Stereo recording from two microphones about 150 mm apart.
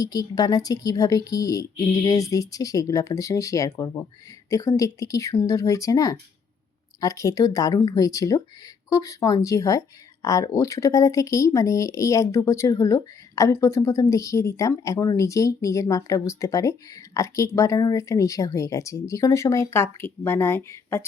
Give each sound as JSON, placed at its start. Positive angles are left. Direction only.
{"t": 0.0, "sound": "speech", "side_deg": 25}